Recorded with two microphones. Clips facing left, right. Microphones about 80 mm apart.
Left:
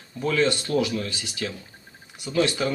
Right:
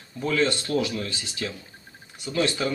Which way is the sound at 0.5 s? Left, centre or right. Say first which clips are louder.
Left 2 dB; centre.